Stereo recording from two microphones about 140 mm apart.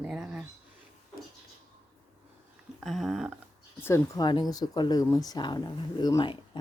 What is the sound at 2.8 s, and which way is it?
Speech, centre (ahead or behind).